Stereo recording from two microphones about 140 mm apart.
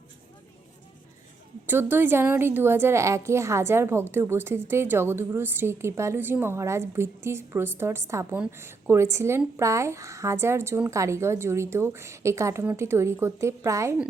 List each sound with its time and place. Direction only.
1.6 s a woman's voice: 15° right (ahead or behind)